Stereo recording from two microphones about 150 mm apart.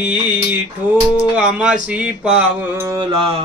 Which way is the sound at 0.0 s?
10° right (ahead or behind).